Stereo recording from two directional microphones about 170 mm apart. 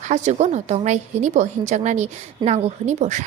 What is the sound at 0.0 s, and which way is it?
A woman's voice, 45° right (ahead or behind).